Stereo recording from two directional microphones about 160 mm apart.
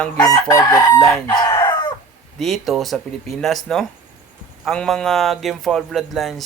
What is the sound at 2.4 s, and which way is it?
A man's voice, centre (ahead or behind).